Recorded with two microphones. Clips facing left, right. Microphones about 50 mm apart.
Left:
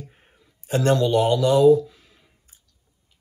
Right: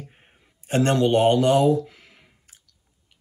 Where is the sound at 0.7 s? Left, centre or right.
Right.